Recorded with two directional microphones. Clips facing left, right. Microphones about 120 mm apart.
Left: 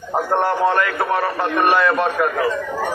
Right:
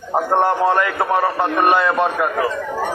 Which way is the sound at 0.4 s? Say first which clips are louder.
Right 1 dB; 25° right (ahead or behind).